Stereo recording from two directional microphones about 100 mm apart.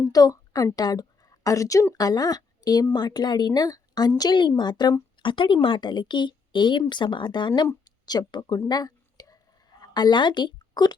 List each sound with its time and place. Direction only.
0.0 s a woman's voice: 40° left (ahead or behind)
5.2 s speech: 55° left (ahead or behind)
7.9 s a sound: 40° left (ahead or behind)
9.8 s a woman's voice: 45° left (ahead or behind)